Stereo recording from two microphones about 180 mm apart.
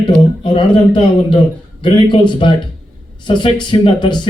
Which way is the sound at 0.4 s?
25° left (ahead or behind).